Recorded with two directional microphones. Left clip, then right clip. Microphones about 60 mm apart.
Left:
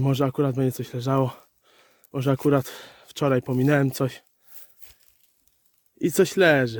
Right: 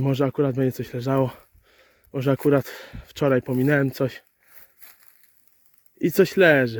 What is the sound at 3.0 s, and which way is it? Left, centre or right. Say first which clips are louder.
Speech: right 2 dB; left.